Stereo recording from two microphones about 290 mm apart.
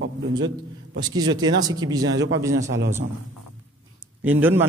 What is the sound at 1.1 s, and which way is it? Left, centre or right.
Speech, centre.